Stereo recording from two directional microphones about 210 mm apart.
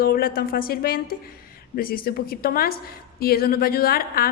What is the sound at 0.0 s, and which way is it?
A woman's voice, 45° left (ahead or behind).